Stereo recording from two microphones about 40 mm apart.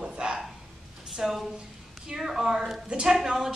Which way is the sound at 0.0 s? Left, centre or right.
Centre.